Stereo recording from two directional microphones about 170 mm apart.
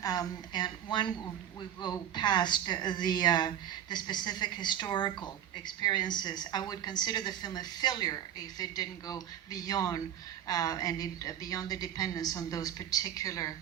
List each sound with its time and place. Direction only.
0.0 s speech: 20° left (ahead or behind)